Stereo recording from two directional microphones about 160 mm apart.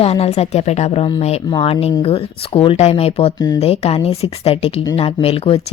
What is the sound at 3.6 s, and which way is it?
Speech, 40° left (ahead or behind).